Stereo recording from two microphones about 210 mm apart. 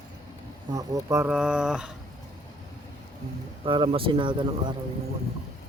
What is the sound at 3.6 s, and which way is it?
Speech, 25° right (ahead or behind).